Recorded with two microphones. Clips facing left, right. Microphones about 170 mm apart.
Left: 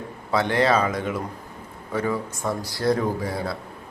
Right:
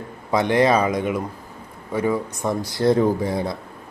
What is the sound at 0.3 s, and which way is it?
Speech, 15° right (ahead or behind).